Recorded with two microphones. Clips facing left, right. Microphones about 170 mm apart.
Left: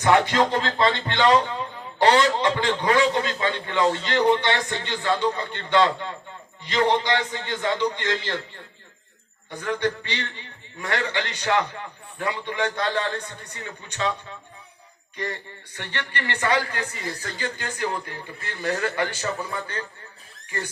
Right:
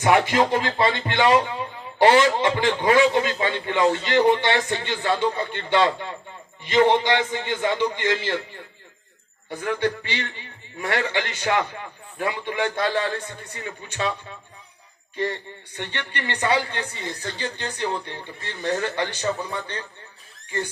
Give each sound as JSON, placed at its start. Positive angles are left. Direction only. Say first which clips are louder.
{"t": 0.0, "sound": "speech", "louder": "right 1 dB", "side_deg": -15}
{"t": 9.6, "sound": "speech", "louder": "right 1 dB", "side_deg": -15}
{"t": 15.1, "sound": "speech", "louder": "right 5 dB", "side_deg": -20}
{"t": 19.2, "sound": "speech", "louder": "right 3 dB", "side_deg": -15}